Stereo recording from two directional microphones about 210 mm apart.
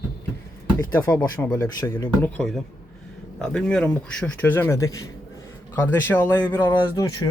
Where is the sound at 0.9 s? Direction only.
10° left (ahead or behind).